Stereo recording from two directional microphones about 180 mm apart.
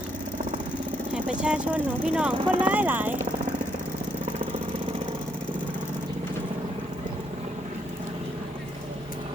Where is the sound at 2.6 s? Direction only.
10° right (ahead or behind).